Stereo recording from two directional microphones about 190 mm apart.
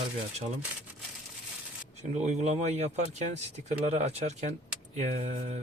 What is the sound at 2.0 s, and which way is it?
Speech, 35° right (ahead or behind).